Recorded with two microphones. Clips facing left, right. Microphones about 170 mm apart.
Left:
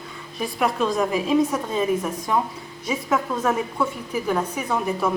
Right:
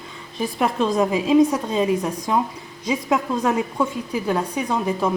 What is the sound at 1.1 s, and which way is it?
A woman's voice, 20° right (ahead or behind).